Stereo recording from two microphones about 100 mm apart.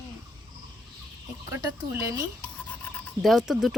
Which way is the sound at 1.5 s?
25° right (ahead or behind).